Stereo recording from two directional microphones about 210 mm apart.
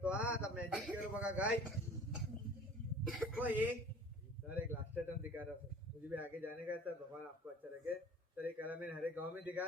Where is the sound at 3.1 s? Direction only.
10° right (ahead or behind).